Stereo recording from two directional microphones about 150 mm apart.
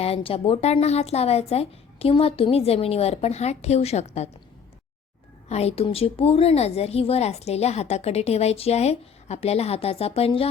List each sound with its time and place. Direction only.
0.0 s a woman's voice: 40° left (ahead or behind)
5.5 s a woman's voice: 45° left (ahead or behind)